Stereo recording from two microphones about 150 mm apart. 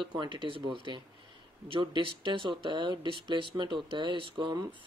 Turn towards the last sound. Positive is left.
turn(degrees=-30)  # may be behind; listen again after turning